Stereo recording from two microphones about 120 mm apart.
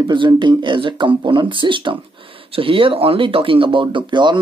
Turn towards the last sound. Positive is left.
turn(degrees=-40)  # may be behind; listen again after turning